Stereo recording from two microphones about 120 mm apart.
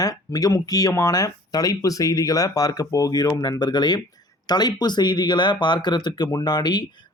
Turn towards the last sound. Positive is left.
turn(degrees=35)  # may be behind; listen again after turning